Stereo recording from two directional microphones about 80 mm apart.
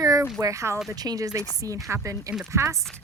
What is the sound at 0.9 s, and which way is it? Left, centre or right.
Speech, right.